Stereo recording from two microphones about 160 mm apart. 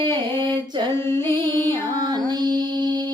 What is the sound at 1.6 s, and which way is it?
Music, 25° right (ahead or behind).